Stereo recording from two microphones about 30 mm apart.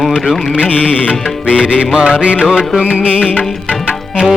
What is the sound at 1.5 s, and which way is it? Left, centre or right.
Music, right.